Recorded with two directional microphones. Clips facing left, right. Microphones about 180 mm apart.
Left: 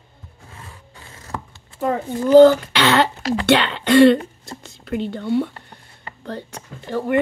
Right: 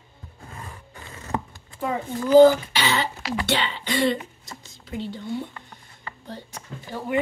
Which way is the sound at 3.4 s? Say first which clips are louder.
Left 10 dB; 70° left (ahead or behind).